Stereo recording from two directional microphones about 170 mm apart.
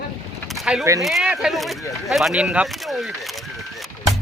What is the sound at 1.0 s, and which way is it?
Speech, centre (ahead or behind).